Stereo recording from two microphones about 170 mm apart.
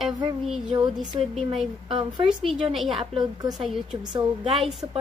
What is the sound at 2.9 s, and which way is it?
Speech, 30° right (ahead or behind).